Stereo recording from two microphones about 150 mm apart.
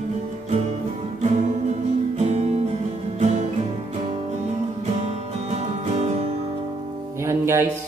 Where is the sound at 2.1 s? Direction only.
45° right (ahead or behind).